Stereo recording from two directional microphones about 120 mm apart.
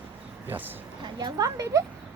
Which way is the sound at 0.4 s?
15° right (ahead or behind).